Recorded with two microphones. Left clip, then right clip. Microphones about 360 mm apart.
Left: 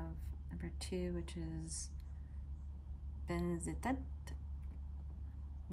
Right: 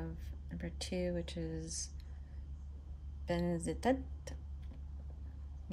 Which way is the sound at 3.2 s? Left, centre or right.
Centre.